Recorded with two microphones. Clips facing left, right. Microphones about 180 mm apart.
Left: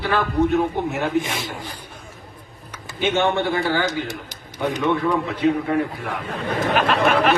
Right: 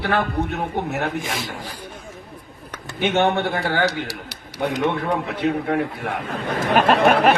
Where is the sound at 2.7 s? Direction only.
60° right (ahead or behind).